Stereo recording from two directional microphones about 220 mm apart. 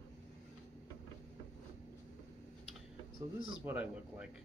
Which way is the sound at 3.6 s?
5° right (ahead or behind).